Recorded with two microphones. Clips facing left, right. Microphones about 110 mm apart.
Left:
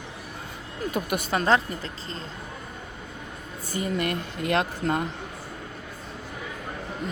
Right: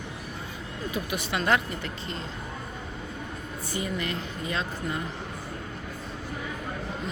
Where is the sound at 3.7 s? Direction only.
50° left (ahead or behind).